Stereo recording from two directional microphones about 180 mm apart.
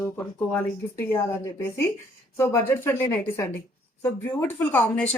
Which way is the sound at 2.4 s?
15° left (ahead or behind).